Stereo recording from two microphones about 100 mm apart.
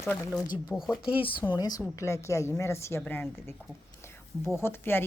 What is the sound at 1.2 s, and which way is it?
Speech, 55° left (ahead or behind).